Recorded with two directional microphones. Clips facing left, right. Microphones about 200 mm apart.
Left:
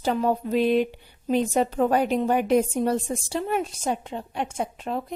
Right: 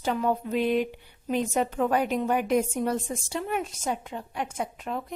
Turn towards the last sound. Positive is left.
turn(degrees=30)  # may be behind; listen again after turning